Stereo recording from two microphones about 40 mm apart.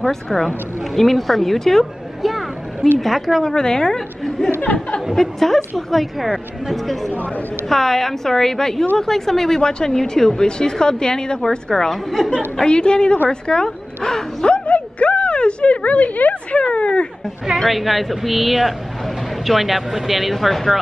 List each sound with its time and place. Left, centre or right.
0.1 s speech: centre
0.9 s a sound: centre
3.0 s speech: centre
3.4 s speech: centre
5.1 s speech: centre
11.9 s speech: centre
12.5 s speech: left
14.5 s a sound: left
16.5 s speech: left
17.6 s speech: centre